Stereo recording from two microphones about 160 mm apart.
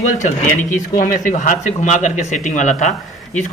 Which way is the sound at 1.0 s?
55° left (ahead or behind).